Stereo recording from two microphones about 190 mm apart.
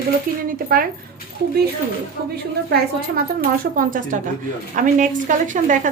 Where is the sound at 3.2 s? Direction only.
45° right (ahead or behind).